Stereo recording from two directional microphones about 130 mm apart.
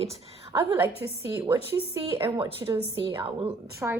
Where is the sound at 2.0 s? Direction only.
40° right (ahead or behind).